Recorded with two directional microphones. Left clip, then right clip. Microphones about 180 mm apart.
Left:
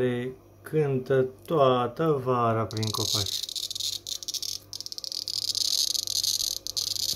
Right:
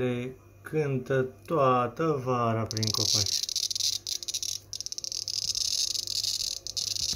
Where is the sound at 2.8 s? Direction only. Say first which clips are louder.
Right 1 dB; 15° left (ahead or behind).